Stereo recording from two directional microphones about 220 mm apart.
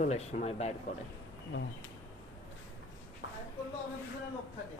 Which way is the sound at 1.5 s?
55° left (ahead or behind).